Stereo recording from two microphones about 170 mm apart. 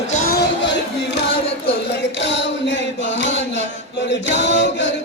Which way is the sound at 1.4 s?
35° left (ahead or behind).